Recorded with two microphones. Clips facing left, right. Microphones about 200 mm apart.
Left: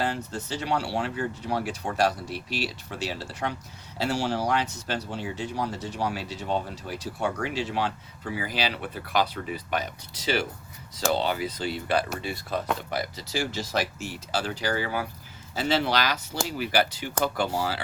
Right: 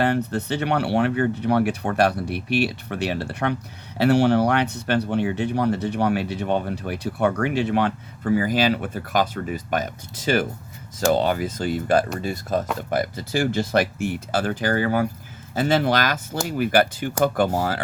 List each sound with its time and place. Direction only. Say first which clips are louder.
0.0 s speech: right 8 dB; 65° right (ahead or behind)